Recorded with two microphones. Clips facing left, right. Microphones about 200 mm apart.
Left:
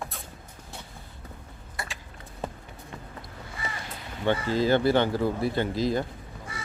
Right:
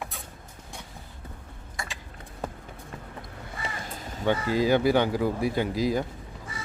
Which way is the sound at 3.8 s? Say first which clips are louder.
Right 2 dB; 45° right (ahead or behind).